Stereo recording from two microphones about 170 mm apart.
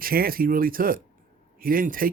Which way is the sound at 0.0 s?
60° right (ahead or behind).